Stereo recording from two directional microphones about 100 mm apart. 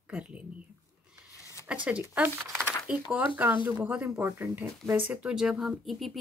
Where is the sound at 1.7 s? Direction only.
10° right (ahead or behind).